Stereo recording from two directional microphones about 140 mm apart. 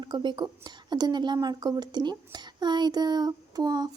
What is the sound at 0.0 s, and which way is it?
A woman's voice, 35° right (ahead or behind).